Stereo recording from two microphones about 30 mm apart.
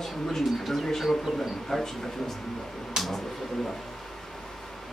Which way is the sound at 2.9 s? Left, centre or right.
Centre.